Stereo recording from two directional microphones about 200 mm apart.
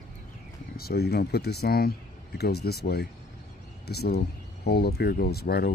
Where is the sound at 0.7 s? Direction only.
50° left (ahead or behind).